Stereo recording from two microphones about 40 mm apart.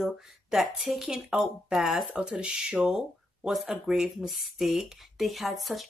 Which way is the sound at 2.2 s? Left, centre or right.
Right.